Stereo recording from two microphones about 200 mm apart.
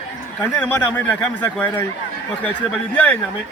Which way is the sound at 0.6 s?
10° left (ahead or behind).